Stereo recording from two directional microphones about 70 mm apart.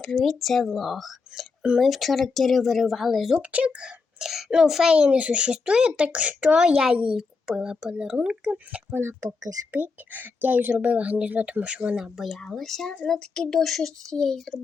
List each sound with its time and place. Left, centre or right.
0.0 s speech: centre
3.4 s a child's voice: centre
9.0 s speech: right
9.7 s speech: right; by 14.6 s centre